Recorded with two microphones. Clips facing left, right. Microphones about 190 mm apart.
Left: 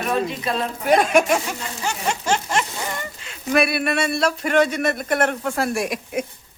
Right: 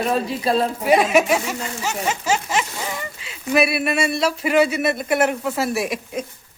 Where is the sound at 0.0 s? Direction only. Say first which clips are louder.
Right 2 dB; 30° right (ahead or behind).